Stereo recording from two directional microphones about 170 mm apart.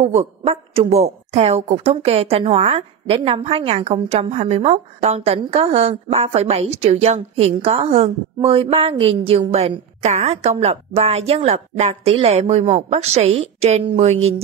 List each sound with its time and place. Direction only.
0.0 s a woman's voice: 35° right (ahead or behind)